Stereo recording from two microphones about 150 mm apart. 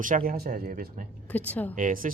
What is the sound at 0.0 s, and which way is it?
Speech, 70° right (ahead or behind).